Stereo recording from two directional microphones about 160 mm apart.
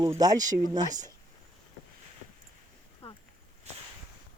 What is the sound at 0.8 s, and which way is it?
Speech, 50° right (ahead or behind).